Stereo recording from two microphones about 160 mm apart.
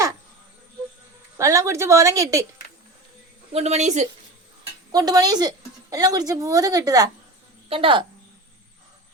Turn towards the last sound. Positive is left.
turn(degrees=-35)  # may be behind; listen again after turning